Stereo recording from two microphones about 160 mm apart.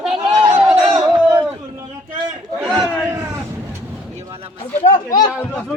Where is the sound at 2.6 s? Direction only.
5° right (ahead or behind).